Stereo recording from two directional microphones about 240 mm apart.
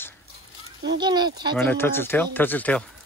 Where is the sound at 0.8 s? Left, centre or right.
Centre.